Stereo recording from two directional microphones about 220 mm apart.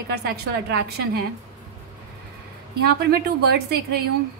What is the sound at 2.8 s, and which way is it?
A woman's voice, 45° right (ahead or behind).